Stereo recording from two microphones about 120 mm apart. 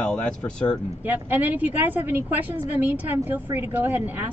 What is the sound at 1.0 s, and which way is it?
Speech, 15° right (ahead or behind).